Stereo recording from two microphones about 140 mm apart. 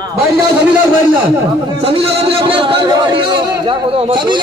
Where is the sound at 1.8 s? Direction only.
40° right (ahead or behind).